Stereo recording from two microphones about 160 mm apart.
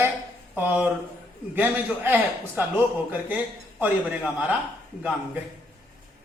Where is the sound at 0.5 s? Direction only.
10° right (ahead or behind).